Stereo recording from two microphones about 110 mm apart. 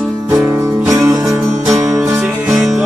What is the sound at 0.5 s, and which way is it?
Music, 25° right (ahead or behind).